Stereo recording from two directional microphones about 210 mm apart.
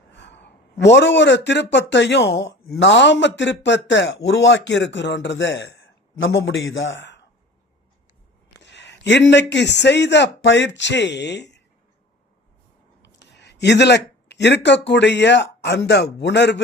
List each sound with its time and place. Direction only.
0.1 s a man's voice: 55° left (ahead or behind)
8.6 s a man's voice: 55° left (ahead or behind)
13.3 s speech: 55° left (ahead or behind)